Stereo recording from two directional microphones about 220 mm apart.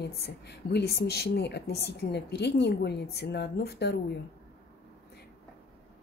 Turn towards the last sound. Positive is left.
turn(degrees=50)  # may be behind; listen again after turning